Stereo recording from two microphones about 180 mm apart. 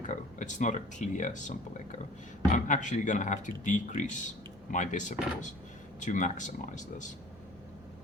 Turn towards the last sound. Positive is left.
turn(degrees=45)  # may be behind; listen again after turning